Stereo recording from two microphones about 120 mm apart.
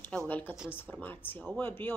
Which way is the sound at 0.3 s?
15° left (ahead or behind).